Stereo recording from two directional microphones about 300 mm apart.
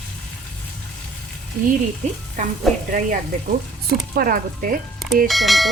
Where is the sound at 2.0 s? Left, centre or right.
Right.